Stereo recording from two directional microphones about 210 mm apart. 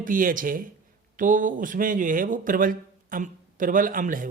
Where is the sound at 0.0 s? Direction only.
40° right (ahead or behind).